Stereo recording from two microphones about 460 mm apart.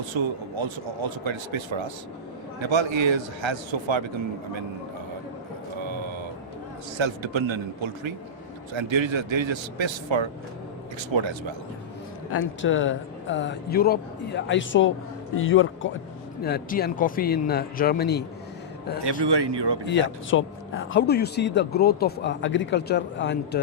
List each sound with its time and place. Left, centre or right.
0.0 s speech: right
5.8 s music: right
6.9 s speech: right
12.3 s speech: left
19.2 s speech: right
19.8 s speech: left